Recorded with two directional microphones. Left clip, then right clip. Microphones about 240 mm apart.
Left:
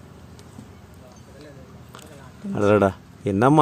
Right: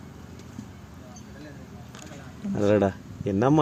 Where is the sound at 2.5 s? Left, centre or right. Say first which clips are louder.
Left 4 dB; left.